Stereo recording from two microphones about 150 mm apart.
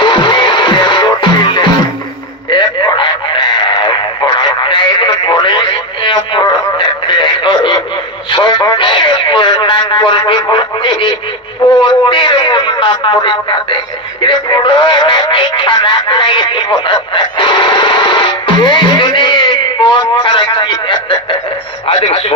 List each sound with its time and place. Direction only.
0.0 s music: 30° left (ahead or behind)
2.5 s radio: 30° left (ahead or behind)
11.8 s a man's voice: 35° left (ahead or behind)